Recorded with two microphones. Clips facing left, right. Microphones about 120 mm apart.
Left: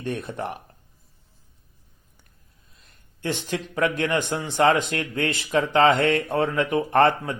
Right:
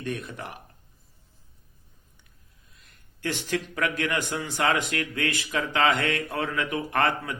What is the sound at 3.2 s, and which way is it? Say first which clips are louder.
A man's voice: left 1 dB; 20° left (ahead or behind).